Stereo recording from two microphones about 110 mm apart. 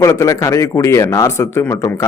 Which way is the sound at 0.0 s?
30° left (ahead or behind).